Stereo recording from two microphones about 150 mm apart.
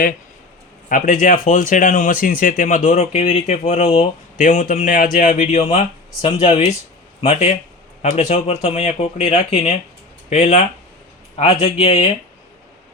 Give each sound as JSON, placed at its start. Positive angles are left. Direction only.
{"t": 0.9, "sound": "speech", "side_deg": 60}
{"t": 11.6, "sound": "speech", "side_deg": 40}